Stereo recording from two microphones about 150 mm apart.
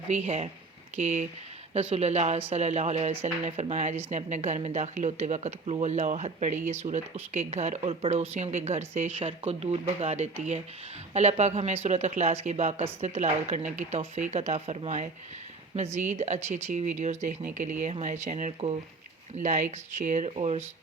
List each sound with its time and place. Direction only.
0.1 s speech: 45° right (ahead or behind)
9.1 s speech: 40° right (ahead or behind)